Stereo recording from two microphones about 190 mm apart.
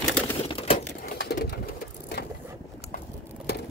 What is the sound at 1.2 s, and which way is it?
Bird, 55° left (ahead or behind).